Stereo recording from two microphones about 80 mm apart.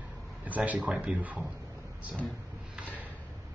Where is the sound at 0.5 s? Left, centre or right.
Centre.